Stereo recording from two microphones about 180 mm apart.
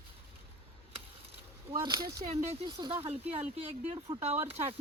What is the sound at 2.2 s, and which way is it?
Speech, 35° right (ahead or behind).